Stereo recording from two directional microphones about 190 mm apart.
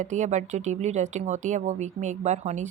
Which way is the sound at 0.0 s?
40° right (ahead or behind).